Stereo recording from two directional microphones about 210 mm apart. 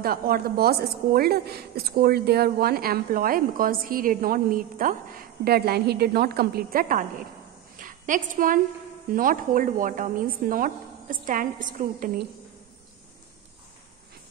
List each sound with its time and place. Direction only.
0.0 s a woman's voice: 45° right (ahead or behind)
7.7 s a sound: 40° right (ahead or behind)
9.1 s a woman's voice: 40° right (ahead or behind)